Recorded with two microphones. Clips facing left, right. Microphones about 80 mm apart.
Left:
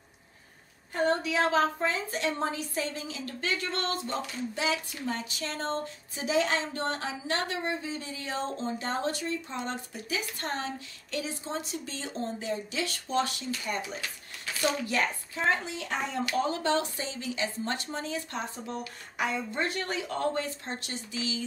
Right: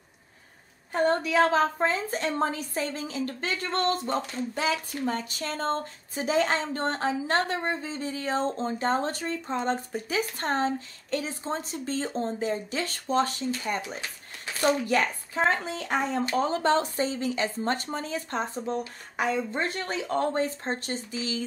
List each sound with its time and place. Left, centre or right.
1.0 s a woman's voice: right
14.9 s speech: right
16.3 s a woman's voice: right